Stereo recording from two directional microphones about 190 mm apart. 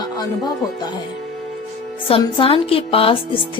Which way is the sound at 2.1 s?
30° left (ahead or behind).